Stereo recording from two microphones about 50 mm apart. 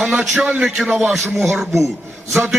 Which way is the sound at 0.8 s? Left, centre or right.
Centre.